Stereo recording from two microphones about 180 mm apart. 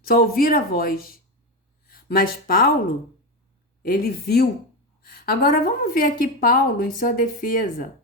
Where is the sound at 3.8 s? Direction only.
55° left (ahead or behind).